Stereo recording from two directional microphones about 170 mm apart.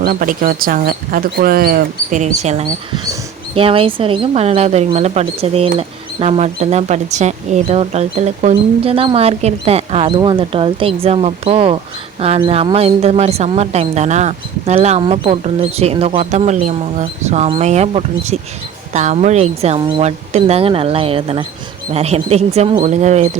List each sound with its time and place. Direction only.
0.0 s speech: 55° right (ahead or behind); by 19.8 s 40° right (ahead or behind)
19.8 s speech: 30° right (ahead or behind)
20.1 s speech: 40° right (ahead or behind)